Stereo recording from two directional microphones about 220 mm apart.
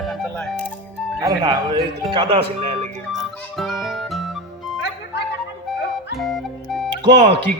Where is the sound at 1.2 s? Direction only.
20° right (ahead or behind).